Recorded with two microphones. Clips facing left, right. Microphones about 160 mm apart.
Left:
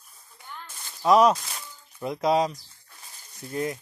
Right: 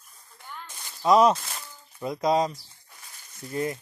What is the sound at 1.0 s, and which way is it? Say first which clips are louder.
A man's voice: even; 5° left (ahead or behind).